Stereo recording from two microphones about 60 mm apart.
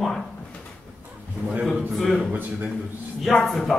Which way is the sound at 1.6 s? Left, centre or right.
Centre.